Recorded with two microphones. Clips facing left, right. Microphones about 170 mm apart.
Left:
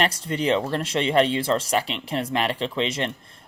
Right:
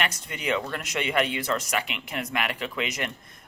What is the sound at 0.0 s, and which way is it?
Speech, 30° left (ahead or behind).